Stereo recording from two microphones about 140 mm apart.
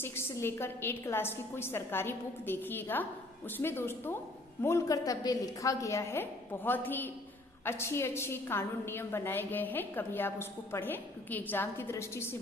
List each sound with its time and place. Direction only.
0.0 s a woman's voice: 15° left (ahead or behind)